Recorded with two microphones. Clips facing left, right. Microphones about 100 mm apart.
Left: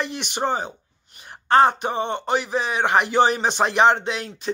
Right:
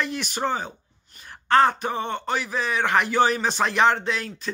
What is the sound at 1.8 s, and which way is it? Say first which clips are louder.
Speech: left 2 dB; 20° left (ahead or behind).